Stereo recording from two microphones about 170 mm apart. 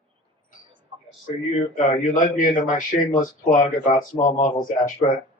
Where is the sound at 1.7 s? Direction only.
50° left (ahead or behind).